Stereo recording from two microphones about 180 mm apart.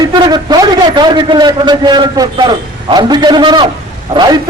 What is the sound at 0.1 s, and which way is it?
A man's voice, 25° right (ahead or behind).